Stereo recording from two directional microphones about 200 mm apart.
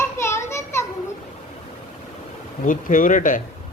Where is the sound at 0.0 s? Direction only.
15° left (ahead or behind).